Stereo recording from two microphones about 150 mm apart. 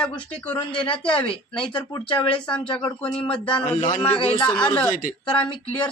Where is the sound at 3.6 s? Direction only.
35° left (ahead or behind).